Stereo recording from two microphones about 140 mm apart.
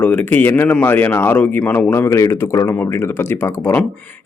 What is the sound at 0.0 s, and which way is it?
A man's voice, 10° left (ahead or behind).